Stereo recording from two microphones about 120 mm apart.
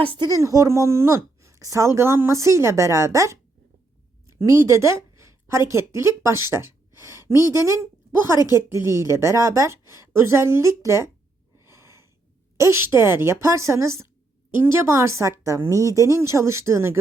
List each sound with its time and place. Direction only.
0.0 s speech: 45° right (ahead or behind)
0.3 s speech: 25° right (ahead or behind)
4.4 s a woman's voice: 25° right (ahead or behind)
11.5 s a sound: 20° right (ahead or behind)
12.5 s speech: 20° right (ahead or behind)